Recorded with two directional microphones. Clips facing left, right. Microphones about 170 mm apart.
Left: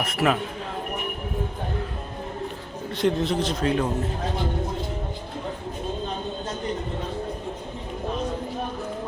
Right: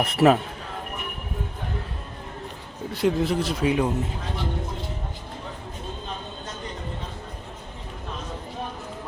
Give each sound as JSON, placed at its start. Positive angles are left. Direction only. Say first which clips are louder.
{"t": 0.0, "sound": "a man's voice", "louder": "right 5 dB", "side_deg": -30}
{"t": 2.9, "sound": "speech", "louder": "even", "side_deg": -5}